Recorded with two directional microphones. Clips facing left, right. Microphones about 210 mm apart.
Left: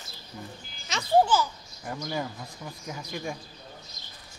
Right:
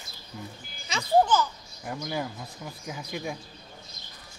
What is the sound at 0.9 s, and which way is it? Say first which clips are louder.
Speech: even; centre (ahead or behind).